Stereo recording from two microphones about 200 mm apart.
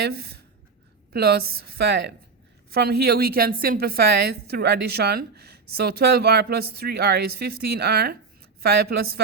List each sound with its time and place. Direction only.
0.0 s a woman's voice: 50° right (ahead or behind)